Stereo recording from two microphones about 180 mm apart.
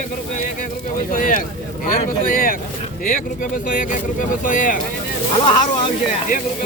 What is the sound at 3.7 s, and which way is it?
Speech, 45° left (ahead or behind).